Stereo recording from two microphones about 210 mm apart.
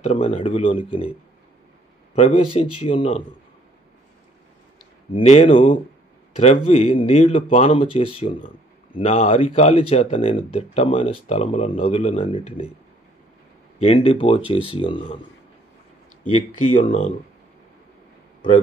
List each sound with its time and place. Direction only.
0.0 s speech: 30° left (ahead or behind)
2.1 s speech: 30° left (ahead or behind)
5.1 s speech: 30° left (ahead or behind)
13.7 s speech: 30° left (ahead or behind)
16.7 s speech: 35° left (ahead or behind)